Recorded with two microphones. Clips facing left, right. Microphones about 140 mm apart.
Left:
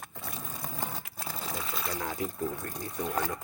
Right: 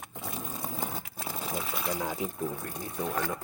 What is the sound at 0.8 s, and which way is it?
Sewing machine, 10° right (ahead or behind).